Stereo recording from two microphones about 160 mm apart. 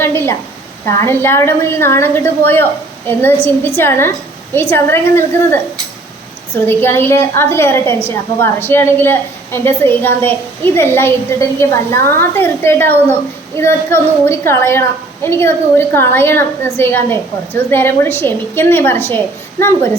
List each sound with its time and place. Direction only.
0.0 s a sound: 15° left (ahead or behind)
0.9 s a woman's voice: 15° left (ahead or behind)
6.7 s a woman's voice: 15° left (ahead or behind)